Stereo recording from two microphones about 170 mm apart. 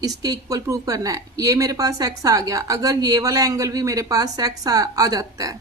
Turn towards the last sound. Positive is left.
turn(degrees=-20)  # may be behind; listen again after turning